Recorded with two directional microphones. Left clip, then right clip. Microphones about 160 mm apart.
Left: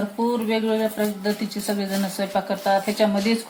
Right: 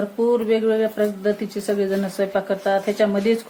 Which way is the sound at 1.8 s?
50° right (ahead or behind).